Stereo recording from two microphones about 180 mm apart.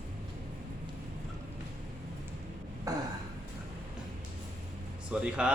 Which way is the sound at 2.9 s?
20° right (ahead or behind).